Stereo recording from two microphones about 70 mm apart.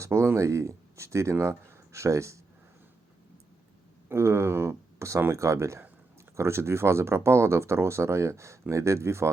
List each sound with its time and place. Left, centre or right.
0.0 s speech: right
4.1 s speech: right